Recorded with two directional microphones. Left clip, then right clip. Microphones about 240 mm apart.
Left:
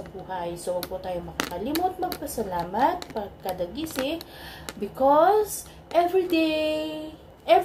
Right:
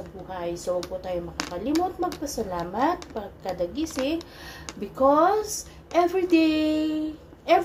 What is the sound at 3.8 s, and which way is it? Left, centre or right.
Speech, left.